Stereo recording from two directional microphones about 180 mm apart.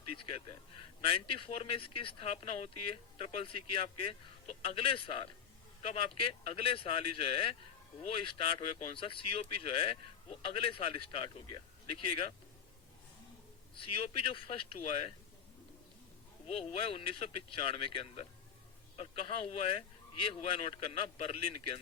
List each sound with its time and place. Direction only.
0.2 s a man's voice: 30° left (ahead or behind)
13.7 s speech: 30° left (ahead or behind)
16.5 s speech: 35° left (ahead or behind)